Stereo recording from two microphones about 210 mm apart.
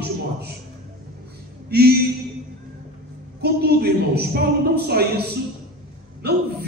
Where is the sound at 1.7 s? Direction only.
50° right (ahead or behind).